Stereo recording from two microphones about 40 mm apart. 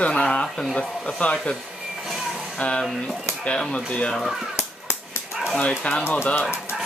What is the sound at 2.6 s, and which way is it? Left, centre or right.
Speech, left.